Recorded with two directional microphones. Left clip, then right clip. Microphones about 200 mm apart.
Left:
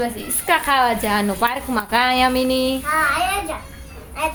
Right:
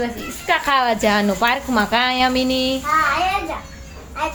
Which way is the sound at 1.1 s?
5° right (ahead or behind).